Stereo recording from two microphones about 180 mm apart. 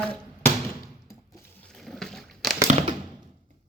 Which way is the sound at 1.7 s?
Centre (ahead or behind).